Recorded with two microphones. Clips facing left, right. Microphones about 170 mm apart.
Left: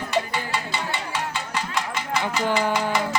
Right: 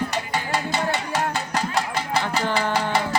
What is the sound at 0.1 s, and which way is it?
Music, 40° right (ahead or behind).